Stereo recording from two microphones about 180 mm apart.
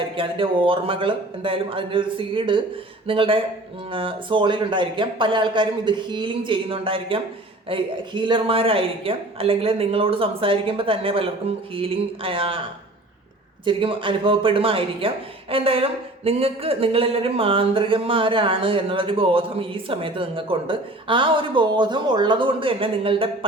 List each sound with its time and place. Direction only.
0.2 s speech: 30° right (ahead or behind)
13.7 s speech: 30° right (ahead or behind)